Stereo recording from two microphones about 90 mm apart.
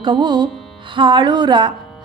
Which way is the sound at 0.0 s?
55° right (ahead or behind).